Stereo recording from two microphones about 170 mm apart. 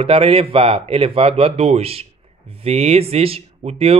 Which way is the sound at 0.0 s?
30° right (ahead or behind).